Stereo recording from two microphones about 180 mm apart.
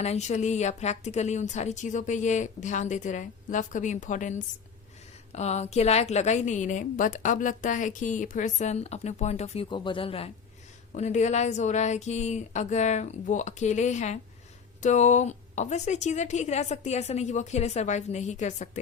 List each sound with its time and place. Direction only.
0.0 s a woman's voice: 40° left (ahead or behind)